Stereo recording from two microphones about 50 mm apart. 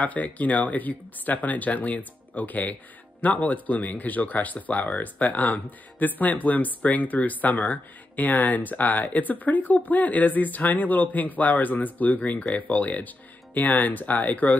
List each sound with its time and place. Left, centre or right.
0.0 s speech: left